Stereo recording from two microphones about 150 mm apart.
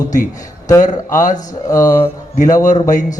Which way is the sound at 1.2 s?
60° left (ahead or behind).